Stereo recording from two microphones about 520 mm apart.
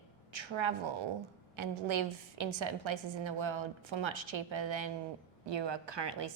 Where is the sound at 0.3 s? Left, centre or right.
Right.